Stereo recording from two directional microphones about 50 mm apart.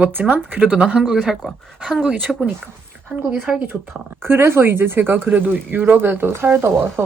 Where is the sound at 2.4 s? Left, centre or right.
Right.